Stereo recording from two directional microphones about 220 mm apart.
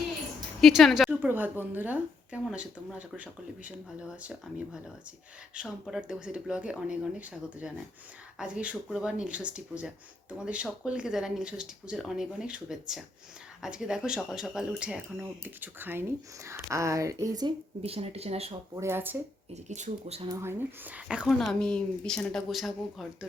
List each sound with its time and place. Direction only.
0.6 s a woman's voice: centre (ahead or behind); by 18.5 s 25° right (ahead or behind)
18.7 s speech: 10° right (ahead or behind)
19.6 s speech: 30° right (ahead or behind)
20.2 s a woman's voice: 15° right (ahead or behind)